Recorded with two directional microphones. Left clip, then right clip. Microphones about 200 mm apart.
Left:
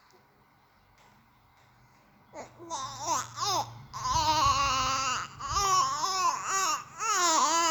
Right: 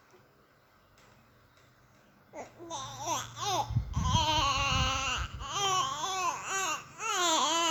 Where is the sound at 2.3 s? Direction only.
20° left (ahead or behind).